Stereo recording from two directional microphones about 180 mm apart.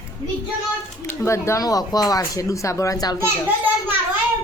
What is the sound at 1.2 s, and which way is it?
A woman's voice, 15° left (ahead or behind).